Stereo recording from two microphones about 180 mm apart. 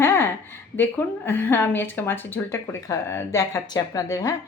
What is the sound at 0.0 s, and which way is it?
A woman's voice, 10° left (ahead or behind).